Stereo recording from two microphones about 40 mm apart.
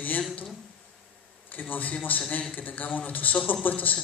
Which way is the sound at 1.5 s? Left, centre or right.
Left.